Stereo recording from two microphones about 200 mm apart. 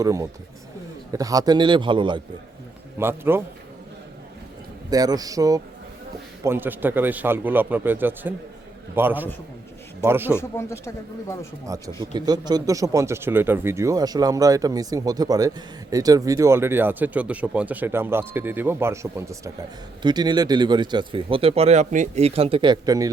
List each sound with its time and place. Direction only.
0.0 s speech: 15° right (ahead or behind)
3.0 s speech: 10° right (ahead or behind)
4.9 s speech: 20° right (ahead or behind)
10.3 s speech: 15° left (ahead or behind)
11.7 s speech: 15° right (ahead or behind)